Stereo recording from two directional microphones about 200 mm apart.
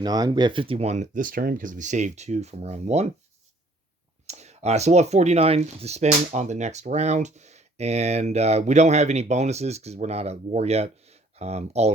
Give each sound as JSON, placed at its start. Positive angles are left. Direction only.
{"t": 0.0, "sound": "speech", "side_deg": -20}
{"t": 4.3, "sound": "speech", "side_deg": -35}